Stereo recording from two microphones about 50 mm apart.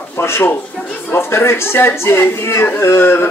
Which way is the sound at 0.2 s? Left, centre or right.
Left.